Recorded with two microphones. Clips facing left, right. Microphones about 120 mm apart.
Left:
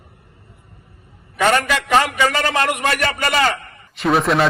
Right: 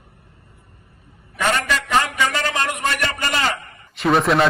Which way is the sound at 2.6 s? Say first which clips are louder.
Left 5 dB; 65° left (ahead or behind).